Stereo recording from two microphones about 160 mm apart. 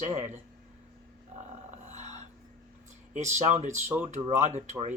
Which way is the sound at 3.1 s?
50° right (ahead or behind).